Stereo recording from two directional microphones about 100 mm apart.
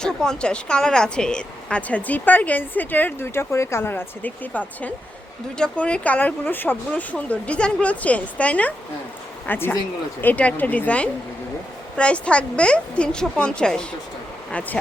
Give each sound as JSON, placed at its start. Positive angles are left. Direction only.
{"t": 0.0, "sound": "speech", "side_deg": 5}